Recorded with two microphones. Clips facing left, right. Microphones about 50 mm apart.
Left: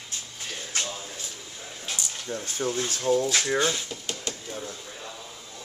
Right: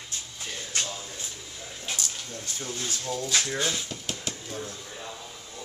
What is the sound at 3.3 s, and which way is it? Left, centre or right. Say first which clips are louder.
Speech: left 3 dB; left.